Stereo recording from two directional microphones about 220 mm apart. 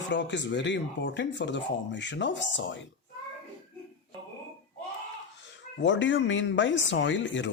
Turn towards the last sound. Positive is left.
turn(degrees=55)  # may be behind; listen again after turning